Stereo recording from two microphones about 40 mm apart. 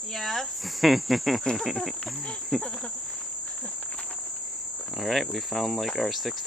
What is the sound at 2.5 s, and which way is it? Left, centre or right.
Cricket, centre.